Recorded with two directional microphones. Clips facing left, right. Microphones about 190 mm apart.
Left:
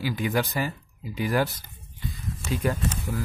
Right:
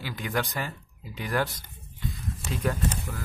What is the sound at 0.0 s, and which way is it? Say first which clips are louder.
Speech: left 5 dB; 5° left (ahead or behind).